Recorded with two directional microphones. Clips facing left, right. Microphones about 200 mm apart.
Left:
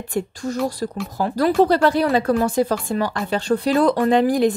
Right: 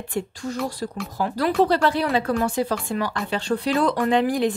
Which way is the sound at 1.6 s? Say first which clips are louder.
Left 3 dB; 45° left (ahead or behind).